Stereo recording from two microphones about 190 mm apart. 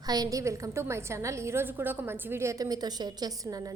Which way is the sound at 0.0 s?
20° right (ahead or behind).